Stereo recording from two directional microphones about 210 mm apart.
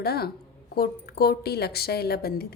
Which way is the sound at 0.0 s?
50° left (ahead or behind).